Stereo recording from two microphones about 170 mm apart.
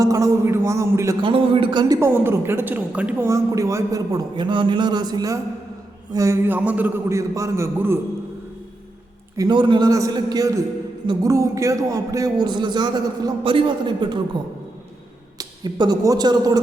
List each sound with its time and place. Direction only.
0.0 s a man's voice: 20° right (ahead or behind)
1.2 s a woman's voice: 30° right (ahead or behind)
2.0 s a woman's voice: 15° right (ahead or behind)
9.4 s a woman's voice: 25° right (ahead or behind)
15.4 s speech: 25° right (ahead or behind)